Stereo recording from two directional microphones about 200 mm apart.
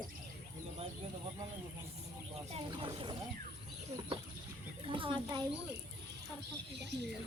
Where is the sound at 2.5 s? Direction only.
25° right (ahead or behind).